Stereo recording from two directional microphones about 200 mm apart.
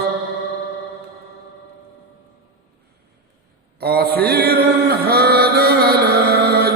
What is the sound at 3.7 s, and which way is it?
Chant, 50° right (ahead or behind).